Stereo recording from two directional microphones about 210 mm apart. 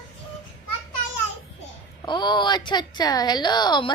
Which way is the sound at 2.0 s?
20° left (ahead or behind).